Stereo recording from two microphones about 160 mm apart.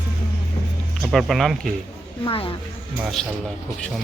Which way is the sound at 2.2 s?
35° left (ahead or behind).